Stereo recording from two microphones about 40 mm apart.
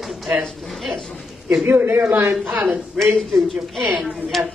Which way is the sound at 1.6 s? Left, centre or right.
Right.